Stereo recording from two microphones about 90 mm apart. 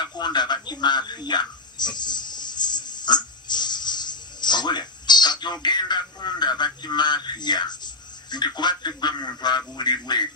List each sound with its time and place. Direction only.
0.0 s frog: 55° left (ahead or behind)
8.3 s a man's voice: 55° left (ahead or behind)